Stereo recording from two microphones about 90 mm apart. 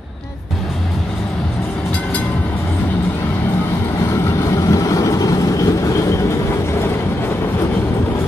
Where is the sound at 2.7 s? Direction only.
20° left (ahead or behind).